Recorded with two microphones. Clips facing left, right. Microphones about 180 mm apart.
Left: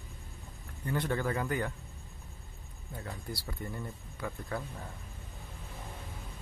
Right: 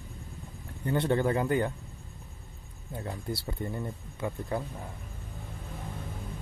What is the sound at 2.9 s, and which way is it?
Speech, 25° right (ahead or behind).